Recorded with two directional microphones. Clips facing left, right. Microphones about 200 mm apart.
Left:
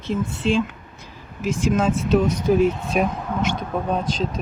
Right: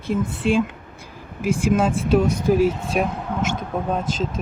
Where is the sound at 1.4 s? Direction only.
10° right (ahead or behind).